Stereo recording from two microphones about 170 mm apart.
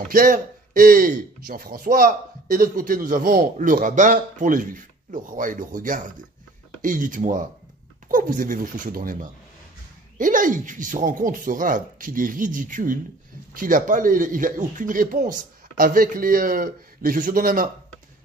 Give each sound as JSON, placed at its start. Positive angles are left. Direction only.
{"t": 0.1, "sound": "a man's voice", "side_deg": -55}